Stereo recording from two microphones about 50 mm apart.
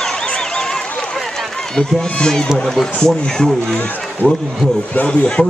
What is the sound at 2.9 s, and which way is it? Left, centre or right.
Speech, centre.